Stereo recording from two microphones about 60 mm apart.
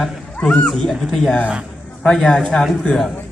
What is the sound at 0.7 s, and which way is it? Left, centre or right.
Music, centre.